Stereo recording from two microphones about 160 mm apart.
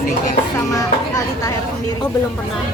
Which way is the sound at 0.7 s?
20° left (ahead or behind).